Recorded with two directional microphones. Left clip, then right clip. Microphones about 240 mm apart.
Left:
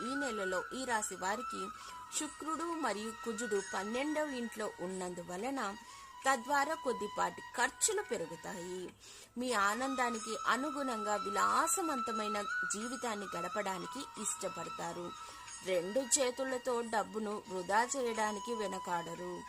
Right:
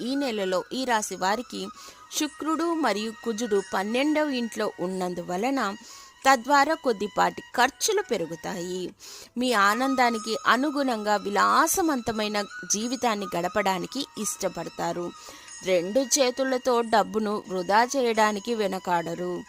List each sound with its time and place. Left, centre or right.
0.0 s speech: right